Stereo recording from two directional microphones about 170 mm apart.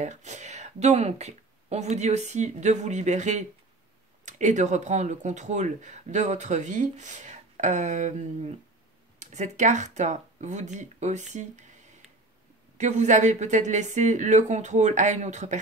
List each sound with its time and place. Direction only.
0.0 s speech: 45° right (ahead or behind)